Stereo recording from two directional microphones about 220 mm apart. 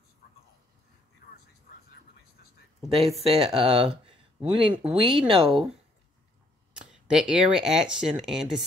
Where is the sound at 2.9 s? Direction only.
25° right (ahead or behind).